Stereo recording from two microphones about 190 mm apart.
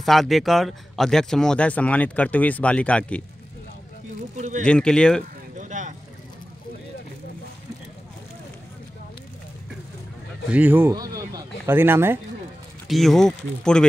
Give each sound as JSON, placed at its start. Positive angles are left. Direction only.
{"t": 0.0, "sound": "speech", "side_deg": 0}
{"t": 4.4, "sound": "speech", "side_deg": -40}
{"t": 4.6, "sound": "speech", "side_deg": 5}
{"t": 5.6, "sound": "vehicle", "side_deg": -40}
{"t": 10.5, "sound": "speech", "side_deg": -10}
{"t": 12.8, "sound": "speech", "side_deg": 0}